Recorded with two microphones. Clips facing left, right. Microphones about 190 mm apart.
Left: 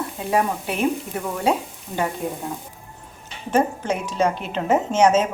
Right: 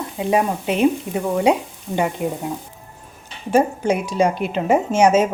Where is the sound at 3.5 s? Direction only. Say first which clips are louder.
Right 4 dB; 10° right (ahead or behind).